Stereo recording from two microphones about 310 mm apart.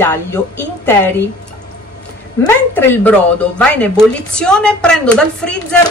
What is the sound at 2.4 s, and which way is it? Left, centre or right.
Speech, centre.